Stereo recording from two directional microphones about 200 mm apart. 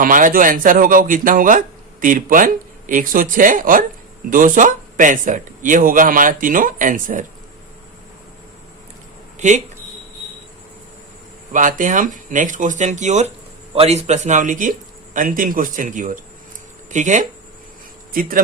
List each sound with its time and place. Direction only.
0.0 s speech: 40° right (ahead or behind)
9.4 s speech: 35° right (ahead or behind)
11.5 s speech: 40° right (ahead or behind)